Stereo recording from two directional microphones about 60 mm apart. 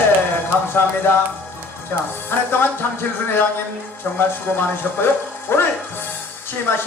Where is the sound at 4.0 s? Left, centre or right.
Left.